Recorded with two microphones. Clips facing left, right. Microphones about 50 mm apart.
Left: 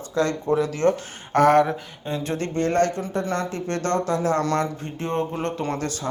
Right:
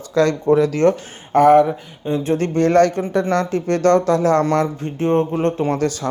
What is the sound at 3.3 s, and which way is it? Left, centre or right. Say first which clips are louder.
Speech: right 7 dB; right.